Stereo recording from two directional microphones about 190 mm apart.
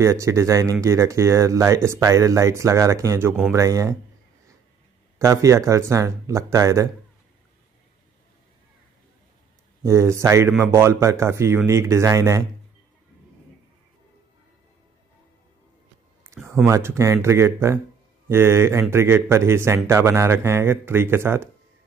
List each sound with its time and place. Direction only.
0.0 s speech: 15° right (ahead or behind)
5.2 s speech: 15° right (ahead or behind)
9.8 s speech: 15° right (ahead or behind)
16.3 s a sound: 15° right (ahead or behind)
16.6 s speech: 15° right (ahead or behind)